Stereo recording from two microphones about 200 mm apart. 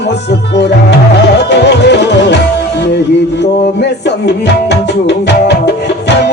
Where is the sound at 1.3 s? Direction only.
60° left (ahead or behind).